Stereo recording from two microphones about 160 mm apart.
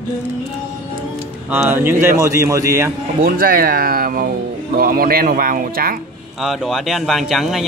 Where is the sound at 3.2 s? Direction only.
65° right (ahead or behind).